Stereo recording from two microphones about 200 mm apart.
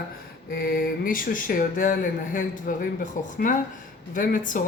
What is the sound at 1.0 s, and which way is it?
Speech, 45° left (ahead or behind).